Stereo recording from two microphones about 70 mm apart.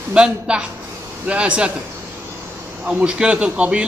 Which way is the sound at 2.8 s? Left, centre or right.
Centre.